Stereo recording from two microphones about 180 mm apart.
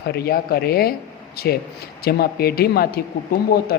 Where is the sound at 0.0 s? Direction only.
60° left (ahead or behind).